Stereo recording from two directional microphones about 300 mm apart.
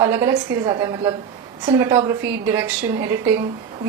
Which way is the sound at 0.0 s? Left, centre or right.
Centre.